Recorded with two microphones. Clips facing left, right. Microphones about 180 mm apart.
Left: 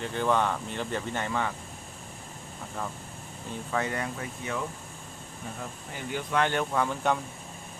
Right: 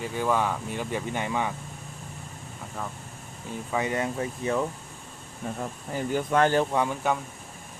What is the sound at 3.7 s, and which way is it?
Speech, 15° right (ahead or behind).